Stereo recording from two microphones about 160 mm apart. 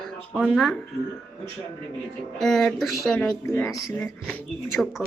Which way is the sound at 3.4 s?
15° left (ahead or behind).